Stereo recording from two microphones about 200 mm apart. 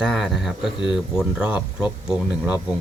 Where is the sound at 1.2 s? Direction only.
5° right (ahead or behind).